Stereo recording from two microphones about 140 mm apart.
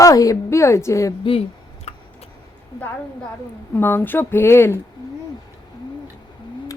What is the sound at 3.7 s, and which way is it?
Speech, 15° left (ahead or behind).